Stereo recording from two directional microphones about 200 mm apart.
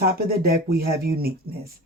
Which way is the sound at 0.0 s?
50° right (ahead or behind).